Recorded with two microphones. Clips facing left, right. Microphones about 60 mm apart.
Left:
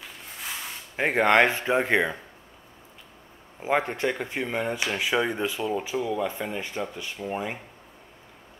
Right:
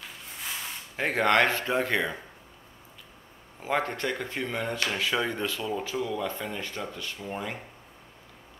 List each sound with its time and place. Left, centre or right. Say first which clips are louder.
0.9 s speech: left 3 dB; centre
3.5 s speech: left 3 dB; centre